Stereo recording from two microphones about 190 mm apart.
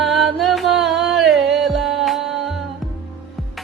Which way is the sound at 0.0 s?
Centre (ahead or behind).